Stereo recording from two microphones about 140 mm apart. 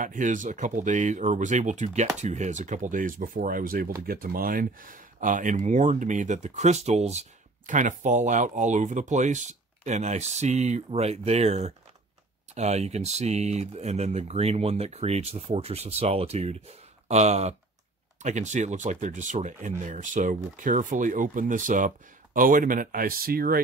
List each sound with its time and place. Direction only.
0.0 s speech: 65° right (ahead or behind); by 23.6 s 90° right